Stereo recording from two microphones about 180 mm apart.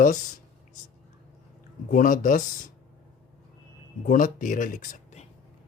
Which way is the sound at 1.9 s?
50° left (ahead or behind).